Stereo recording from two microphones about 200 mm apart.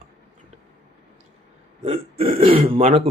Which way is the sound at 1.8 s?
30° right (ahead or behind).